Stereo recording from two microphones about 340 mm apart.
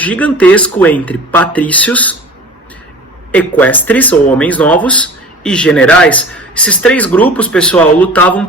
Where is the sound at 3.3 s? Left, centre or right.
Centre.